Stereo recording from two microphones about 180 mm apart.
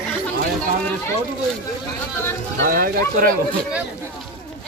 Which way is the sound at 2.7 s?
50° right (ahead or behind).